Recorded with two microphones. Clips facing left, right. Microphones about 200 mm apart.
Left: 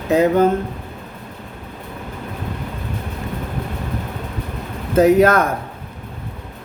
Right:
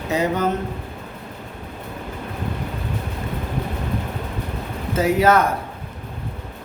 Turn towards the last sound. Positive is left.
turn(degrees=50)  # may be behind; listen again after turning